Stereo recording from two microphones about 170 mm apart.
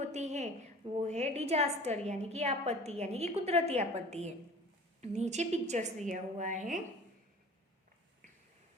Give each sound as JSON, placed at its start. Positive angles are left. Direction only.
{"t": 0.0, "sound": "a woman's voice", "side_deg": -45}